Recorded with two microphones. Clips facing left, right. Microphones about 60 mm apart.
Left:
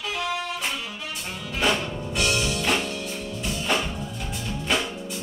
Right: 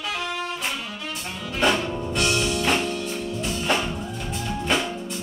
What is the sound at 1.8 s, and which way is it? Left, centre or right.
Music, right.